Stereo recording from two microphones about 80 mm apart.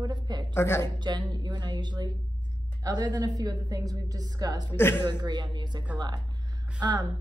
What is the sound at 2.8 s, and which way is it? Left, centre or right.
A woman's voice, right.